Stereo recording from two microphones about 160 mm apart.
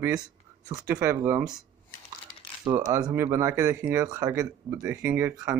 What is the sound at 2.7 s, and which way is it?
Speech, 20° right (ahead or behind).